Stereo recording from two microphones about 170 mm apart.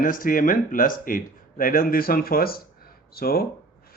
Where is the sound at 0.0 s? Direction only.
55° left (ahead or behind).